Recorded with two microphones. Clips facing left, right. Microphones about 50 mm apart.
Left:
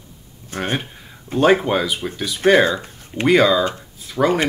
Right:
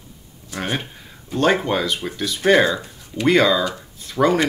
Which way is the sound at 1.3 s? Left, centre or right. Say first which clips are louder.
Left 3 dB; centre.